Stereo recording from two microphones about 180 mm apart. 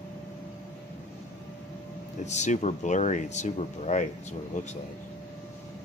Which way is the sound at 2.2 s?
40° left (ahead or behind).